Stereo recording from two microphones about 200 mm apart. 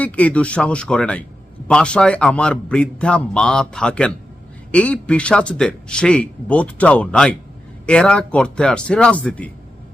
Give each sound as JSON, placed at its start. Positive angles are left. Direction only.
{"t": 0.0, "sound": "speech", "side_deg": 5}